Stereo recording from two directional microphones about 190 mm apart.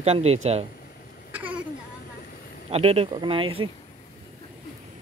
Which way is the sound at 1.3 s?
10° right (ahead or behind).